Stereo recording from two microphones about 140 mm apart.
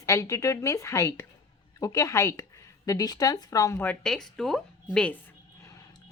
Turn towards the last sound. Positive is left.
turn(degrees=5)  # may be behind; listen again after turning